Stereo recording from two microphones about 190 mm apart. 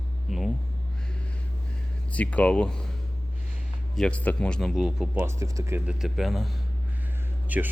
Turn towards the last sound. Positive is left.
turn(degrees=-10)  # may be behind; listen again after turning